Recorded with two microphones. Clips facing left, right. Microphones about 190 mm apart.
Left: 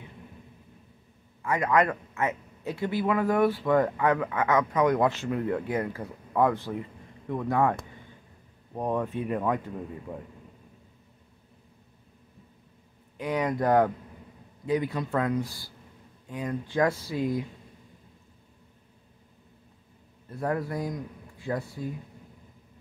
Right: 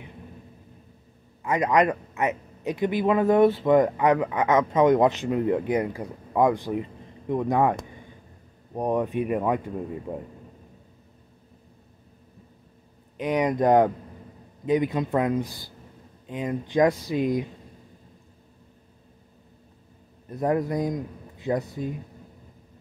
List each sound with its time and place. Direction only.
1.4 s a man's voice: 20° right (ahead or behind)
10.1 s a man's voice: 30° right (ahead or behind)
13.2 s a man's voice: 20° right (ahead or behind)
20.2 s a man's voice: 20° right (ahead or behind)